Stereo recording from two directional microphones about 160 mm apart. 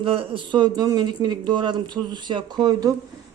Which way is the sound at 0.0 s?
35° right (ahead or behind).